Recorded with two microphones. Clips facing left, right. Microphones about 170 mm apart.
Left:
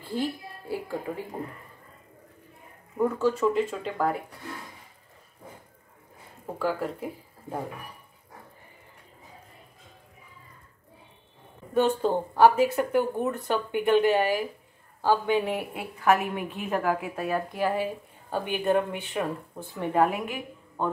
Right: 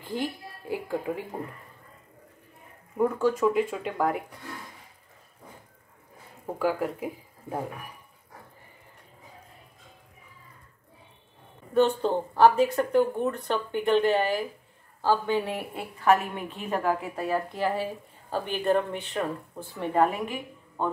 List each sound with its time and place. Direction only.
0.0 s a woman's voice: 15° right (ahead or behind)
3.0 s speech: 10° right (ahead or behind)
6.4 s speech: 15° right (ahead or behind)
11.7 s a woman's voice: 5° left (ahead or behind)